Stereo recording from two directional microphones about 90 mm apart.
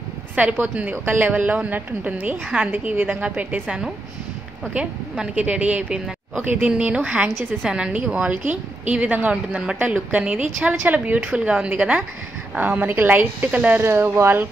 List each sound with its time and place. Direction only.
0.4 s a woman's voice: 15° right (ahead or behind)
13.8 s a woman's voice: 25° right (ahead or behind)